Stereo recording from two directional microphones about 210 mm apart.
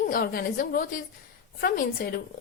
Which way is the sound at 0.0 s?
45° left (ahead or behind).